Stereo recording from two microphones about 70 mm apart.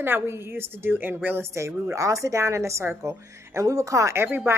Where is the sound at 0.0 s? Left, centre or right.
Right.